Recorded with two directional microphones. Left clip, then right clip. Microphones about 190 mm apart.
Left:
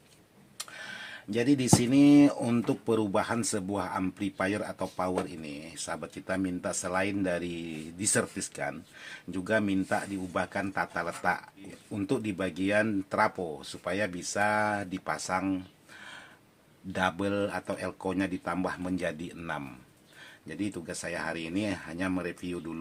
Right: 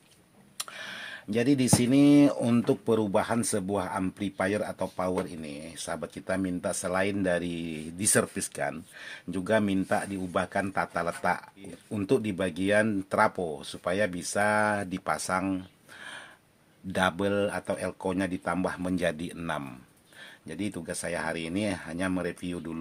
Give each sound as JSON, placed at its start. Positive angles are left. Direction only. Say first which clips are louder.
{"t": 0.6, "sound": "speech", "louder": "right 3 dB", "side_deg": -50}
{"t": 16.9, "sound": "speech", "louder": "right 3 dB", "side_deg": -40}